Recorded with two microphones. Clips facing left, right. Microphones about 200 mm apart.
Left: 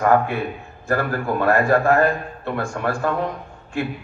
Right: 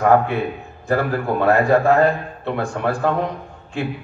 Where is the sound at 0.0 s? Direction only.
15° right (ahead or behind).